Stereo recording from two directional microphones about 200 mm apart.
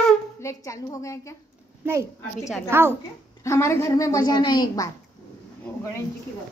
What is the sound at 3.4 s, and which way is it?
Speech, 15° left (ahead or behind).